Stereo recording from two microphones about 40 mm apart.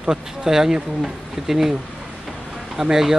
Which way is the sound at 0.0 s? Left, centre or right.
Centre.